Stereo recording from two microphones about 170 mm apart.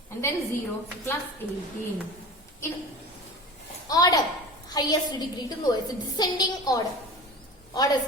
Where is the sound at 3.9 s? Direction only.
20° left (ahead or behind).